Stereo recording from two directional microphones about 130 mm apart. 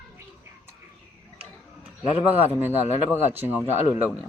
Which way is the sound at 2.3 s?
15° right (ahead or behind).